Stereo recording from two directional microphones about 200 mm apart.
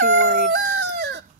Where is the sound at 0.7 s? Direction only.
65° right (ahead or behind).